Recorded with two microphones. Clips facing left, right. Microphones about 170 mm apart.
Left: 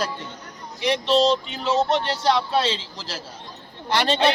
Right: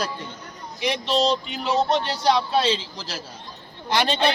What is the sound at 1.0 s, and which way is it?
Speech, 15° right (ahead or behind).